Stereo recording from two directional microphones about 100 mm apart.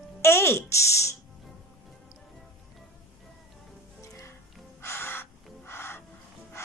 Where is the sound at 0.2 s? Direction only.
25° left (ahead or behind).